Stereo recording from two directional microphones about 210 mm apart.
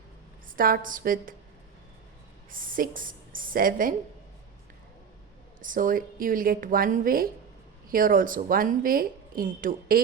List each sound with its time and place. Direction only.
0.4 s speech: 40° right (ahead or behind)
2.5 s speech: 40° right (ahead or behind)
5.6 s speech: 40° right (ahead or behind)